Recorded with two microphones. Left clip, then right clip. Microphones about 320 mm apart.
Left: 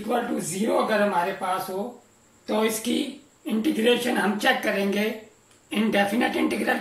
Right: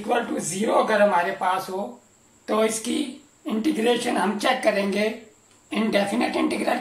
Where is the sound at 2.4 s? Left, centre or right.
Right.